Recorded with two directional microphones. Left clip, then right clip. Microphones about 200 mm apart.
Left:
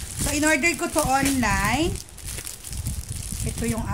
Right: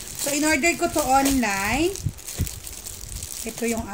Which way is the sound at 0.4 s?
35° left (ahead or behind).